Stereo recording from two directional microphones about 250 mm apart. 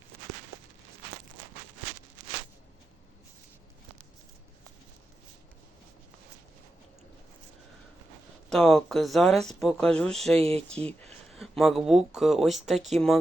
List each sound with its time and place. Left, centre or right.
8.4 s speech: centre
10.3 s speech: right
10.7 s speech: centre